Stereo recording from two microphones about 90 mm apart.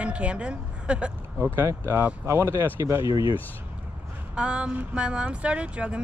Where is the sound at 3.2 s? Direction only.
70° left (ahead or behind).